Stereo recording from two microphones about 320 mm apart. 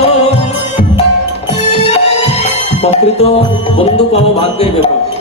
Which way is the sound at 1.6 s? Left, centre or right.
Centre.